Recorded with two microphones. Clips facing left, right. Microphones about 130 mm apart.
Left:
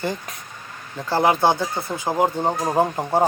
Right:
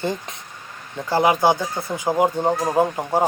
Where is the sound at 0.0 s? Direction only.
20° right (ahead or behind).